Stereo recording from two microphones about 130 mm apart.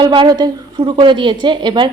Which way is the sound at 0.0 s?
40° right (ahead or behind).